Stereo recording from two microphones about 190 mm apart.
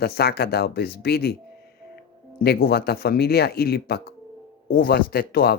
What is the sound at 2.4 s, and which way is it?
Speech, 55° left (ahead or behind).